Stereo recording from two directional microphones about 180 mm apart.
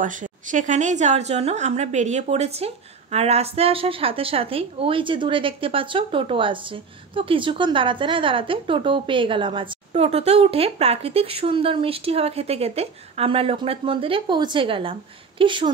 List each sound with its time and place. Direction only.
0.0 s a woman's voice: 45° right (ahead or behind); by 15.7 s 25° right (ahead or behind)